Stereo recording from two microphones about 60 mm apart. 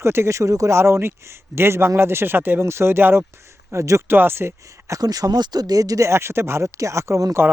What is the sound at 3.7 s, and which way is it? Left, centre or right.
Speech, right.